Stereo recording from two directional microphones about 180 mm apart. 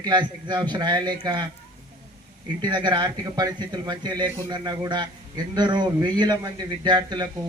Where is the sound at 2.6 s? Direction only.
25° right (ahead or behind).